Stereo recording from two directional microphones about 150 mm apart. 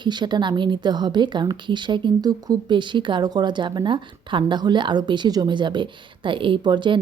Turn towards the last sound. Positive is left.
turn(degrees=-30)  # may be behind; listen again after turning